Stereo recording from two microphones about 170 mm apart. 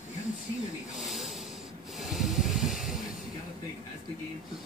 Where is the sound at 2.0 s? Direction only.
Centre (ahead or behind).